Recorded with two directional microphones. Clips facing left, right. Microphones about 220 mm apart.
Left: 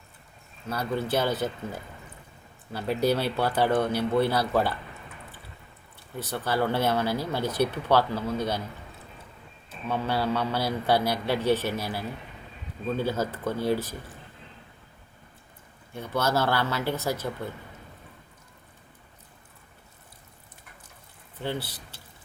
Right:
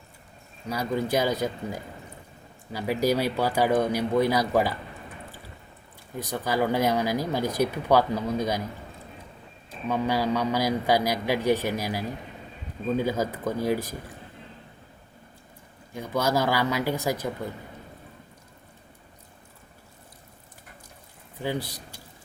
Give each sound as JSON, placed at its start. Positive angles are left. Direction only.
{"t": 0.7, "sound": "speech", "side_deg": -15}
{"t": 6.1, "sound": "speech", "side_deg": -15}
{"t": 9.6, "sound": "speech", "side_deg": -15}
{"t": 13.0, "sound": "speech", "side_deg": -10}
{"t": 16.0, "sound": "speech", "side_deg": -10}
{"t": 21.3, "sound": "speech", "side_deg": -15}